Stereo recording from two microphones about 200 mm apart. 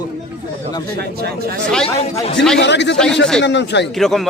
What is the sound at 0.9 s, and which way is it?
Speech, 55° right (ahead or behind).